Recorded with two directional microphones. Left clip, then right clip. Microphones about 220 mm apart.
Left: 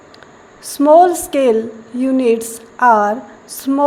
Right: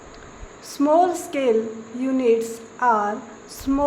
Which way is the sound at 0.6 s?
25° left (ahead or behind).